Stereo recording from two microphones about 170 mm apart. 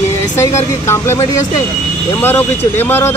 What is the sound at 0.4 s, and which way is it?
Speech, 15° left (ahead or behind).